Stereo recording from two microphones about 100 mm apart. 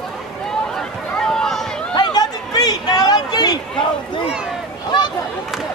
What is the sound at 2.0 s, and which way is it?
Chatter, 45° left (ahead or behind).